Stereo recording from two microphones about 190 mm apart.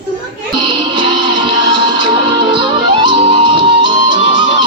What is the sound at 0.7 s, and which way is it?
Music, 25° right (ahead or behind).